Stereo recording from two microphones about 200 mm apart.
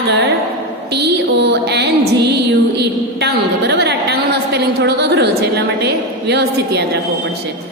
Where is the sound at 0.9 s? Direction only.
55° right (ahead or behind).